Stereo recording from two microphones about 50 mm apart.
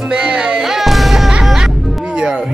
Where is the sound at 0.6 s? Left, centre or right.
Centre.